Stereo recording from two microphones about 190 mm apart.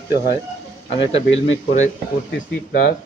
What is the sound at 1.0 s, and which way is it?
Speech, 30° left (ahead or behind).